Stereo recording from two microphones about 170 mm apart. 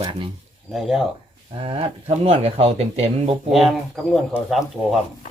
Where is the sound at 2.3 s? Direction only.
35° right (ahead or behind).